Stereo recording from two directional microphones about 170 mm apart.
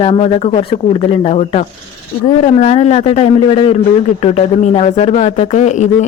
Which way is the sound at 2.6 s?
40° left (ahead or behind).